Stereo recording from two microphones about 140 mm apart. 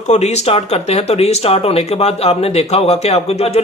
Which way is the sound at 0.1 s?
55° left (ahead or behind).